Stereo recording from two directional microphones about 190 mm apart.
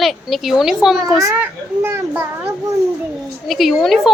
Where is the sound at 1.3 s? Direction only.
10° right (ahead or behind).